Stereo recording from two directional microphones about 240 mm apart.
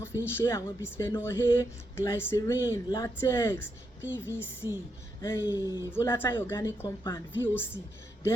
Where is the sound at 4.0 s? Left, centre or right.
Centre.